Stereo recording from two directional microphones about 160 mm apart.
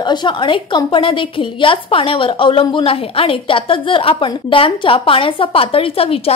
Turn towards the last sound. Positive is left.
turn(degrees=35)  # may be behind; listen again after turning